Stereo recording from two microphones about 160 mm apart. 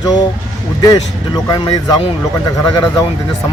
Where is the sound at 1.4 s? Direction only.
25° left (ahead or behind).